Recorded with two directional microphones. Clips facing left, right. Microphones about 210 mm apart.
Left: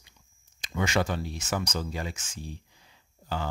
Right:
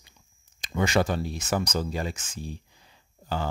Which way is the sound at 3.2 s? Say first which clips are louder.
Right 3 dB; 35° right (ahead or behind).